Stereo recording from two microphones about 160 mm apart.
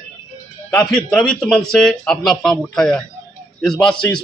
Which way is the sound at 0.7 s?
5° left (ahead or behind).